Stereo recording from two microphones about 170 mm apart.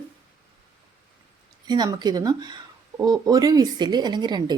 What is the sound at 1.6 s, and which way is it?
Speech, 25° right (ahead or behind).